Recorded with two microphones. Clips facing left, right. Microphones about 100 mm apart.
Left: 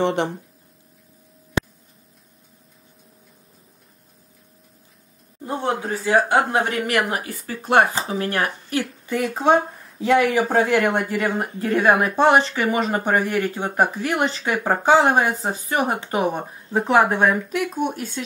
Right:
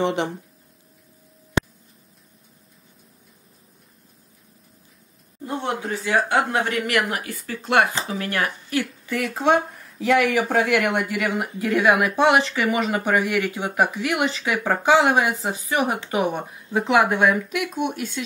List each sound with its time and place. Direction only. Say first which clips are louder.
0.0 s speech: left 2 dB; 35° left (ahead or behind)
5.7 s speech: left 4 dB; 30° left (ahead or behind)